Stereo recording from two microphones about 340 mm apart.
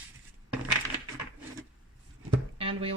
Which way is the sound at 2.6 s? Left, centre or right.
Centre.